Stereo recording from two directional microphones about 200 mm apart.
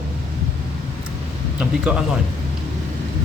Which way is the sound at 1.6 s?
5° right (ahead or behind).